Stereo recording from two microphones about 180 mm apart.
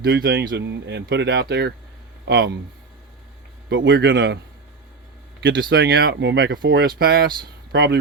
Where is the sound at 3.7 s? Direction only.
80° right.